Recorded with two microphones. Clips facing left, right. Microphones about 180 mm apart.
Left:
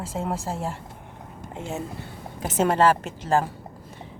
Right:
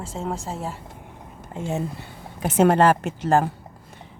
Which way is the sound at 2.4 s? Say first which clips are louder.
Right 3 dB; 60° right (ahead or behind).